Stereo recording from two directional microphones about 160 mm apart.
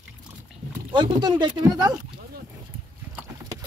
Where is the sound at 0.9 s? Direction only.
30° right (ahead or behind).